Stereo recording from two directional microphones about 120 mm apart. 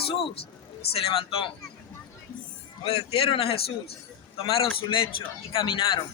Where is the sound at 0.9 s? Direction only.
50° left (ahead or behind).